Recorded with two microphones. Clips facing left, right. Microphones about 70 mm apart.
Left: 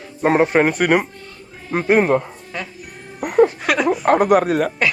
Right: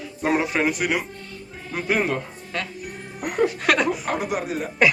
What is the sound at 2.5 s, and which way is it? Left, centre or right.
Speech, centre.